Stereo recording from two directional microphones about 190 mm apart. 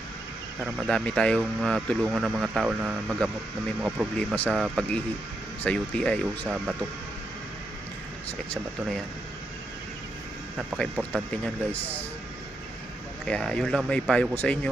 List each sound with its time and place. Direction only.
0.9 s speech: 5° left (ahead or behind)
4.2 s speech: 5° left (ahead or behind)
10.8 s speech: 5° left (ahead or behind)
13.2 s speech: 5° left (ahead or behind)